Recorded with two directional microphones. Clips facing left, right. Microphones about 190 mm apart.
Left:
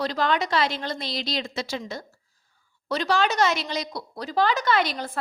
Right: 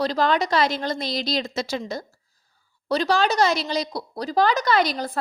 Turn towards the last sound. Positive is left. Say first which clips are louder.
# right 3 dB
turn(degrees=-40)  # may be behind; listen again after turning